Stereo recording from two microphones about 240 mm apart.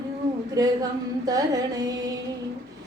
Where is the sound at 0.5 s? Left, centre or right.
Centre.